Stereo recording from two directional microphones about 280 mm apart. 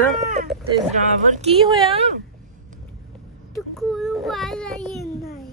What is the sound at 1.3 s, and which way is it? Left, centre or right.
Speech, right.